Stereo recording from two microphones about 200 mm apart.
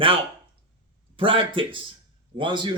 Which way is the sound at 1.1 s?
25° right (ahead or behind).